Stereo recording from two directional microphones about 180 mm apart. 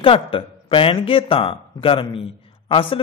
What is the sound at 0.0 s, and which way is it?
A man's voice, 30° left (ahead or behind).